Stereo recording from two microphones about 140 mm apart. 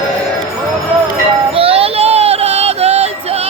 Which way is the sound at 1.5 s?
45° right (ahead or behind).